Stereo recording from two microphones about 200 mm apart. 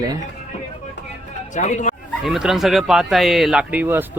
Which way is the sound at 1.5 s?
35° left (ahead or behind).